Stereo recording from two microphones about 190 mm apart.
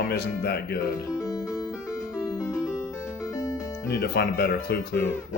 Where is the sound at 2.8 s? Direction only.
15° left (ahead or behind).